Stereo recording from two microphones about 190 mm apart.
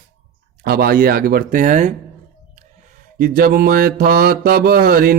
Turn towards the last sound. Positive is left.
turn(degrees=-50)  # may be behind; listen again after turning